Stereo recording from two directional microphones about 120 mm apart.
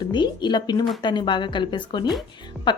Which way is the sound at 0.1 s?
40° left (ahead or behind).